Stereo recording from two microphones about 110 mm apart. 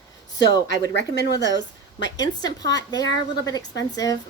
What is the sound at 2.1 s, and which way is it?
Speech, 35° left (ahead or behind).